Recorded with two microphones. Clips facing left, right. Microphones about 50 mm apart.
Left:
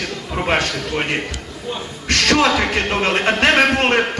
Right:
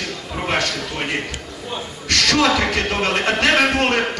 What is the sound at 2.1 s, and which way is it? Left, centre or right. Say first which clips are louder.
A man's voice: left 1 dB; left.